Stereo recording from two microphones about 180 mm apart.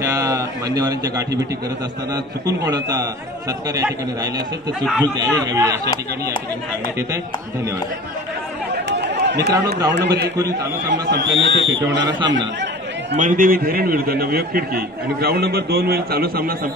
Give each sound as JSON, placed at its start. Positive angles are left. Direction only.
{"t": 0.0, "sound": "a man's voice", "side_deg": -20}
{"t": 2.4, "sound": "a man's voice", "side_deg": -20}
{"t": 8.7, "sound": "chatter", "side_deg": -70}
{"t": 9.8, "sound": "a man's voice", "side_deg": -70}
{"t": 11.1, "sound": "speech", "side_deg": -80}
{"t": 13.1, "sound": "a man's voice", "side_deg": -45}